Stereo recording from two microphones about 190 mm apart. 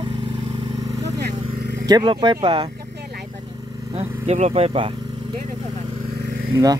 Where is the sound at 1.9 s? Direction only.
20° right (ahead or behind).